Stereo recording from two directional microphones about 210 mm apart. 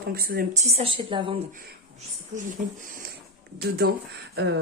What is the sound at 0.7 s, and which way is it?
Speech, 25° right (ahead or behind).